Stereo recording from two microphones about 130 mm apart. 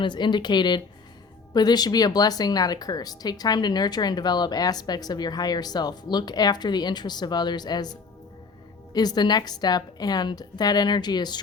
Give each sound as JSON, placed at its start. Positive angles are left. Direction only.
{"t": 0.0, "sound": "speech", "side_deg": 35}